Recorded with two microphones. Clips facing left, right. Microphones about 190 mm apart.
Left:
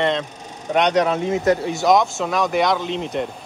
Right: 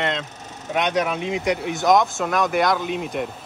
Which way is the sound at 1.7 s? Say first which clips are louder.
Left 1 dB; centre (ahead or behind).